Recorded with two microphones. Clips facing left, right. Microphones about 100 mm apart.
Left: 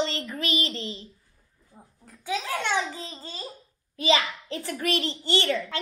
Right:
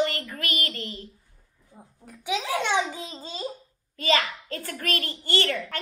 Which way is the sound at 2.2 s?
15° right (ahead or behind).